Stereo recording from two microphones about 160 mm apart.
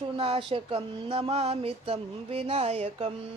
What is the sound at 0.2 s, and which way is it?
Speech, 35° right (ahead or behind).